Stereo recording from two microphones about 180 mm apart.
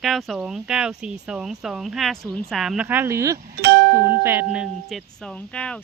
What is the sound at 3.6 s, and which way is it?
Speech, 60° right (ahead or behind).